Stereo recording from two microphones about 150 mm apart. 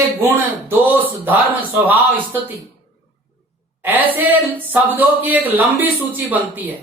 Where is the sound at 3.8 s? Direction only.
10° right (ahead or behind).